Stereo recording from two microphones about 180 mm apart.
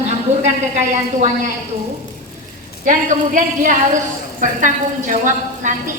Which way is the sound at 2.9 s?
45° right (ahead or behind).